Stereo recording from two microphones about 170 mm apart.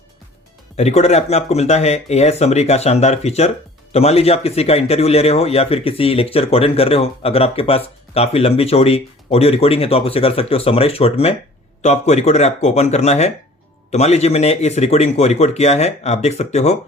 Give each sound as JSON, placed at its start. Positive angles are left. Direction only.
{"t": 0.8, "sound": "a man's voice", "side_deg": 40}